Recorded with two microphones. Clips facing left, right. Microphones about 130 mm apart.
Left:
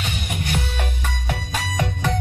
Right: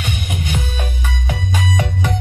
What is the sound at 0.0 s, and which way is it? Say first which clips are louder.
Music: right 3 dB; 10° right (ahead or behind).